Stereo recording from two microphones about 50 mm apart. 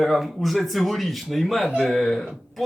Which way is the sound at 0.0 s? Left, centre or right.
Centre.